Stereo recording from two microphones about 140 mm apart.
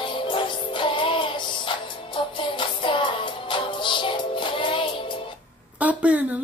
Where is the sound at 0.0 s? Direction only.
35° left (ahead or behind).